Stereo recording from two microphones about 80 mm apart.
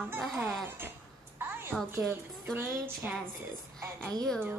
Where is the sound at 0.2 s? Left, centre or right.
Centre.